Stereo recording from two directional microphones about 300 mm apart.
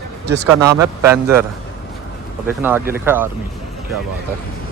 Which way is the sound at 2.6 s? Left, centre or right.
Centre.